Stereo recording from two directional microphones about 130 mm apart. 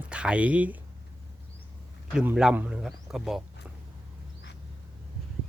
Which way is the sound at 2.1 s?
10° right (ahead or behind).